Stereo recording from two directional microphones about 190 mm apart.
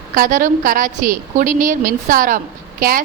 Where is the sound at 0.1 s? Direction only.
45° right (ahead or behind).